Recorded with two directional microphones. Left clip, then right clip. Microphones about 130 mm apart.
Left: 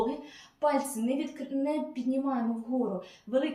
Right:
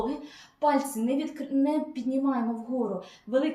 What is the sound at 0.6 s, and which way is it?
A woman's voice, 20° right (ahead or behind).